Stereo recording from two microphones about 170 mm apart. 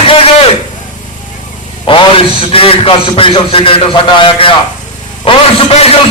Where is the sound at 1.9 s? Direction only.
30° left (ahead or behind).